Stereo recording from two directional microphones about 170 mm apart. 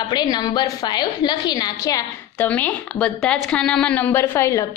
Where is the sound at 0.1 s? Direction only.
25° left (ahead or behind).